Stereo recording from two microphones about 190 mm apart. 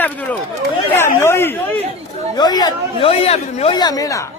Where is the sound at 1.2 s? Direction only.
10° left (ahead or behind).